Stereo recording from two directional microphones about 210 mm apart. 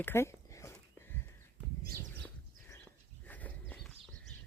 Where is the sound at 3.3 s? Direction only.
5° left (ahead or behind).